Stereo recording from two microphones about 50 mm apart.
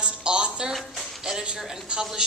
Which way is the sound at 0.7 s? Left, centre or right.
Centre.